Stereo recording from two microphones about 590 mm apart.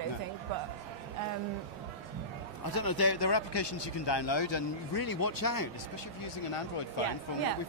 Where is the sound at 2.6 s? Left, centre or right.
Left.